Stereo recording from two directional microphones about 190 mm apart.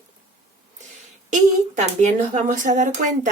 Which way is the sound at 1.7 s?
40° right (ahead or behind).